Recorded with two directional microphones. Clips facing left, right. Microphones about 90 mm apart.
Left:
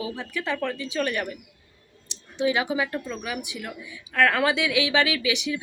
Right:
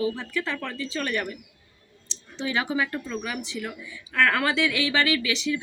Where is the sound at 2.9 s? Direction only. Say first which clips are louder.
Even; 10° left (ahead or behind).